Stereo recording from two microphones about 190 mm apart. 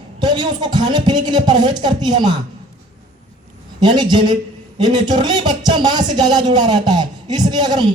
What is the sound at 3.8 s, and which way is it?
Speech, 25° right (ahead or behind).